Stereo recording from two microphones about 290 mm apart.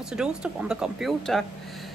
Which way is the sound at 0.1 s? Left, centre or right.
Centre.